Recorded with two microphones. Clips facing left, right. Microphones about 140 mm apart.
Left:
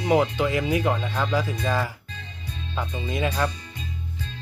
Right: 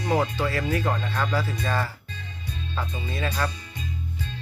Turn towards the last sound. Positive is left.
turn(degrees=10)  # may be behind; listen again after turning